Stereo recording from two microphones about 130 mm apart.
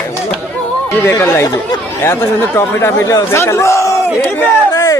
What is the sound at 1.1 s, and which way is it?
Speech, 20° left (ahead or behind).